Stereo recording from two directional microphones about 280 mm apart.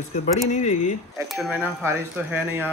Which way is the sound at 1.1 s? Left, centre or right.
Centre.